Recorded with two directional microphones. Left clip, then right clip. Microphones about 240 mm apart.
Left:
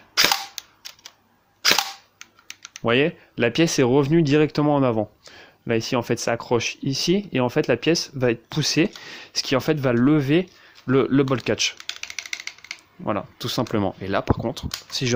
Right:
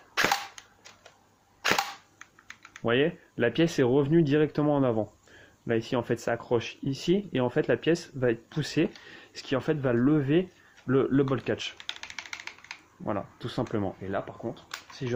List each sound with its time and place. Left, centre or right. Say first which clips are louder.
2.8 s speech: left 6 dB; left
13.1 s speech: left 7 dB; left